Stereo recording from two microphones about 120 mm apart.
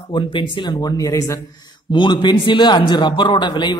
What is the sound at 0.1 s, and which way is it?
Speech, 40° left (ahead or behind).